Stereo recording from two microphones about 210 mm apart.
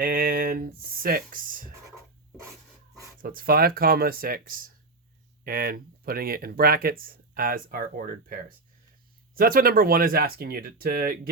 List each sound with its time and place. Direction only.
0.0 s speech: 45° right (ahead or behind)
3.2 s speech: 45° right (ahead or behind)